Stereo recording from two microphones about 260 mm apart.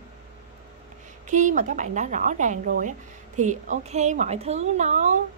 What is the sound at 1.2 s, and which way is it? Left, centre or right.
Speech, right.